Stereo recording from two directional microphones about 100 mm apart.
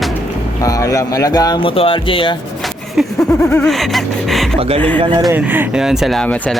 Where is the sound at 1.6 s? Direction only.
65° left (ahead or behind).